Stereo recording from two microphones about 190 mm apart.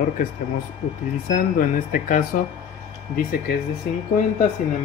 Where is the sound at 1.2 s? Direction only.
45° left (ahead or behind).